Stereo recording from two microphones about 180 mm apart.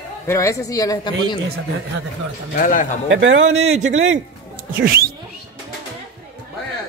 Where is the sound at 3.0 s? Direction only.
90° right.